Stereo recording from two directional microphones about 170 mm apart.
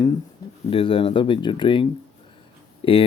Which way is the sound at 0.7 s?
30° left (ahead or behind).